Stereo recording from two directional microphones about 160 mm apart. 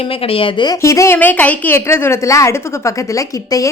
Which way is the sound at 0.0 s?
35° left (ahead or behind).